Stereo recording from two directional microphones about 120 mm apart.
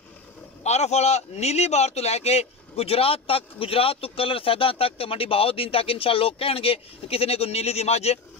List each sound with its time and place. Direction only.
0.7 s speech: 65° left (ahead or behind)